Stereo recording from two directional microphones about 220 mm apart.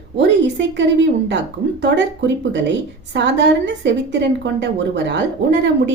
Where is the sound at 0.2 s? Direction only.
55° right (ahead or behind).